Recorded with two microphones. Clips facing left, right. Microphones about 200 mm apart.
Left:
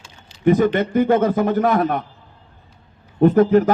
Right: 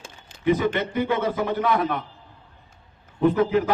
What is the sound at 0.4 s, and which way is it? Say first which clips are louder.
A man's voice: left 6 dB; 45° left (ahead or behind).